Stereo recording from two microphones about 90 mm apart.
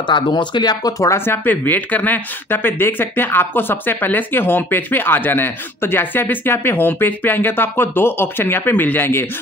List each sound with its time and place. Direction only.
0.0 s speech: 60° left (ahead or behind); by 9.2 s 25° left (ahead or behind)